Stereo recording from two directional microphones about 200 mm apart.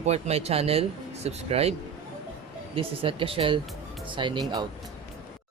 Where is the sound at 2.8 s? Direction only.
25° right (ahead or behind).